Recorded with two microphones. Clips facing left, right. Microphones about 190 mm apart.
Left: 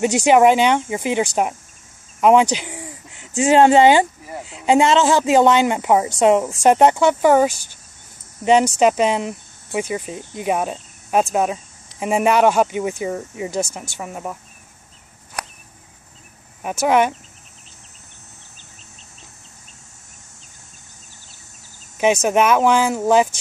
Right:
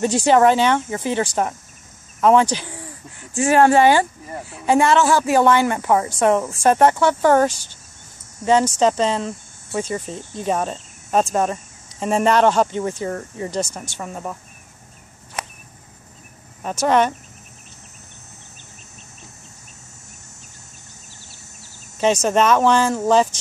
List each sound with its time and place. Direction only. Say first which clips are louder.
0.0 s speech: left 2 dB; 15° left (ahead or behind)
16.6 s speech: left 1 dB; 10° left (ahead or behind)
21.9 s speech: left 1 dB; 10° left (ahead or behind)